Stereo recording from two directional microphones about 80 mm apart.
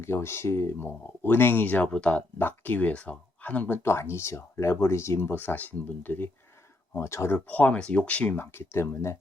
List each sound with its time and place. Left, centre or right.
0.0 s speech: left; by 2.2 s centre
2.4 s speech: left
7.0 s speech: left
7.3 s speech: centre